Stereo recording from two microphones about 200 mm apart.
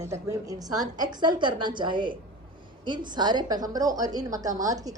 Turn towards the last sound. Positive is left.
turn(degrees=-15)  # may be behind; listen again after turning